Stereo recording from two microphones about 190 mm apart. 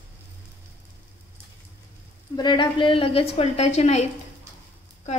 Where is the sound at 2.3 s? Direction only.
25° left (ahead or behind).